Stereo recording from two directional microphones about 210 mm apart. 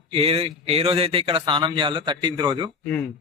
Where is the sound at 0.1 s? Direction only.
25° right (ahead or behind).